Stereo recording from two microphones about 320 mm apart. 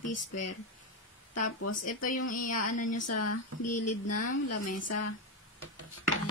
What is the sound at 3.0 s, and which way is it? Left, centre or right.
A woman's voice, left.